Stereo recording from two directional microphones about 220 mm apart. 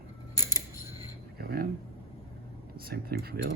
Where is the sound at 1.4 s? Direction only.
40° right (ahead or behind).